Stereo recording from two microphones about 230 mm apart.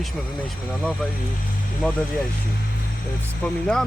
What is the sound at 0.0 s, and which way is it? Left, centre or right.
Speech, centre.